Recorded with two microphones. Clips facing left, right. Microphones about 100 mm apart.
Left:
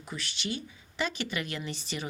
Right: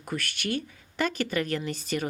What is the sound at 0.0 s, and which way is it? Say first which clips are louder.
A woman's voice: right 5 dB; 55° right (ahead or behind).